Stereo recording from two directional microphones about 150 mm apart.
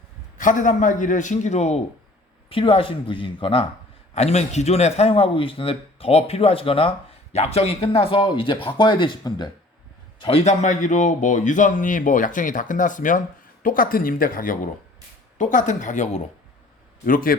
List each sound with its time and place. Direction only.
0.3 s a man's voice: 60° left (ahead or behind); by 3.7 s 35° left (ahead or behind)
4.1 s a man's voice: 45° left (ahead or behind); by 9.5 s 30° left (ahead or behind)
10.2 s a man's voice: 40° left (ahead or behind)
17.1 s a man's voice: 70° left (ahead or behind)